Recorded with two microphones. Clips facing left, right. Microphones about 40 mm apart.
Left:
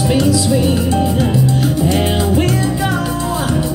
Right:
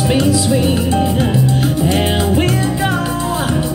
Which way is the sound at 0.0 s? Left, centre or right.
Right.